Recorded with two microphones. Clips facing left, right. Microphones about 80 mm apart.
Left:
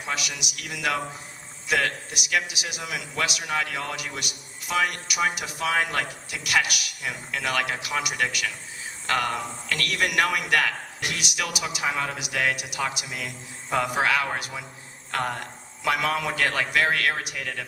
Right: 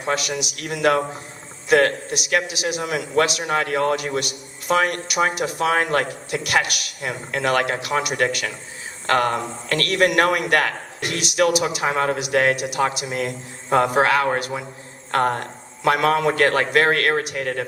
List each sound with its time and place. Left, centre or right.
0.0 s a man's voice: right
2.3 s a man's voice: right